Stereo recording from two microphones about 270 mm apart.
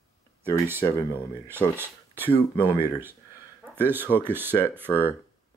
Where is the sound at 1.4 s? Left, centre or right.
Centre.